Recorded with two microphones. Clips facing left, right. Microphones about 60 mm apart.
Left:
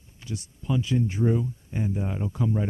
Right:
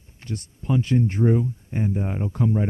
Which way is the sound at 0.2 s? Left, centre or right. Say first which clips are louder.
Right 3 dB; right.